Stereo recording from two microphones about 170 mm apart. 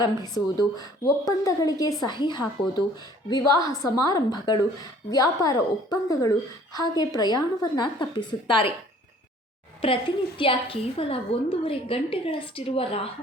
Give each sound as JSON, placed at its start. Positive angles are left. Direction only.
{"t": 0.0, "sound": "a woman's voice", "side_deg": 25}
{"t": 9.8, "sound": "a woman's voice", "side_deg": 30}